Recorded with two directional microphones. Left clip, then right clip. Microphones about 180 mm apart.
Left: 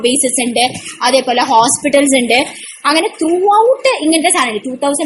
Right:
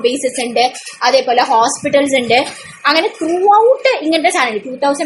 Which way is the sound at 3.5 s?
45° left (ahead or behind).